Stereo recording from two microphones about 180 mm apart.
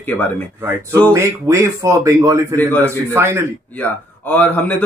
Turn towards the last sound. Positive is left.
turn(degrees=10)  # may be behind; listen again after turning